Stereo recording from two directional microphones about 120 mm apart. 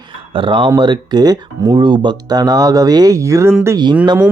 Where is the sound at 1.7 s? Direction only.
40° right (ahead or behind); by 3.5 s 25° right (ahead or behind).